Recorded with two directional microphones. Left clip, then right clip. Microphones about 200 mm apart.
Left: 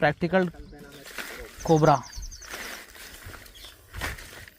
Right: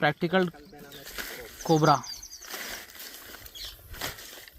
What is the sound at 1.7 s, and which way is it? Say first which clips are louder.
Speech: left 2 dB; 25° left (ahead or behind).